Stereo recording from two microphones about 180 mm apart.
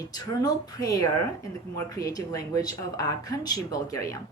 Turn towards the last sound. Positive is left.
turn(degrees=15)  # may be behind; listen again after turning